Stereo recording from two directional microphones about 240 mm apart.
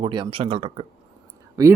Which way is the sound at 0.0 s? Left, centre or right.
Centre.